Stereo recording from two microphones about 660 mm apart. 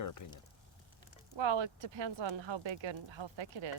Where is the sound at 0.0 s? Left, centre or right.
Left.